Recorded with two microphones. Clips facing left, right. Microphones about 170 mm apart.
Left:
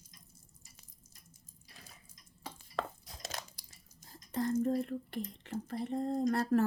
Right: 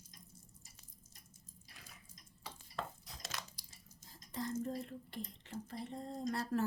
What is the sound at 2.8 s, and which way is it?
Chopping, 90° left.